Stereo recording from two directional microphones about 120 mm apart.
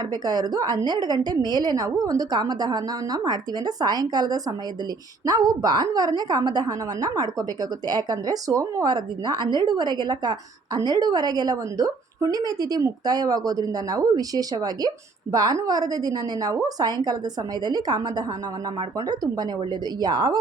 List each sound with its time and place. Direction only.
0.1 s a woman's voice: 35° right (ahead or behind)